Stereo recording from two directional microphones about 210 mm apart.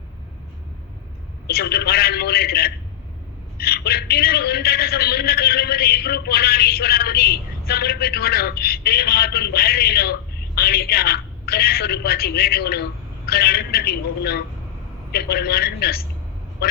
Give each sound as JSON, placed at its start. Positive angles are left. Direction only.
{"t": 1.5, "sound": "a man's voice", "side_deg": 45}